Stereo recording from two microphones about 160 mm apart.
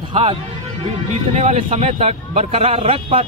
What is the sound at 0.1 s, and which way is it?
Speech, 35° right (ahead or behind).